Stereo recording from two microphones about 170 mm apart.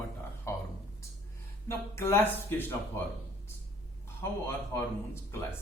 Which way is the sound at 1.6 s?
15° left (ahead or behind).